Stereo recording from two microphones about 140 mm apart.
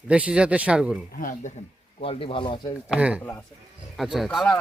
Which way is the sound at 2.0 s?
40° left (ahead or behind).